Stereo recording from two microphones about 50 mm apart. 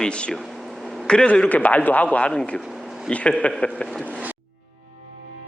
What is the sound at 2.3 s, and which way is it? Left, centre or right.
Speech, centre.